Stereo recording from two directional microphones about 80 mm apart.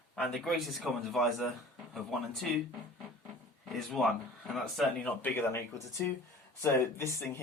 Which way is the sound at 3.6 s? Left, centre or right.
Centre.